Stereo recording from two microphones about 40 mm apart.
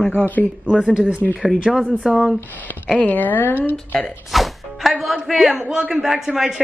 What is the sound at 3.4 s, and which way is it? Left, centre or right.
Speech, left.